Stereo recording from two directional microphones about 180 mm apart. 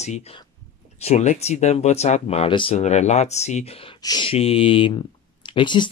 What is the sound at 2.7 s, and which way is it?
Speech, 40° left (ahead or behind).